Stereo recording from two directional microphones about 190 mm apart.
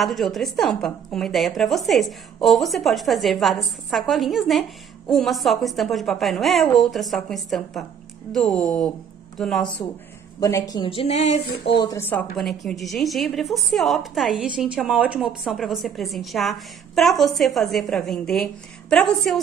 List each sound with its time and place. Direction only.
0.0 s a woman's voice: centre (ahead or behind)
10.4 s speech: 20° left (ahead or behind); by 11.4 s 35° left (ahead or behind)
11.8 s a woman's voice: 15° left (ahead or behind)